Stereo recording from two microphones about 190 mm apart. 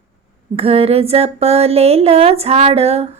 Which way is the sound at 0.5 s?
30° right (ahead or behind).